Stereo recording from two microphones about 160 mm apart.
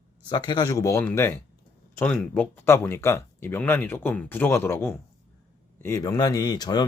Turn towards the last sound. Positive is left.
turn(degrees=25)  # may be behind; listen again after turning